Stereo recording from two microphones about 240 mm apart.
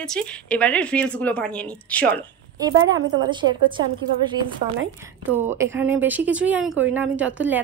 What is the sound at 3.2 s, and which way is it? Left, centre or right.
Speech, centre.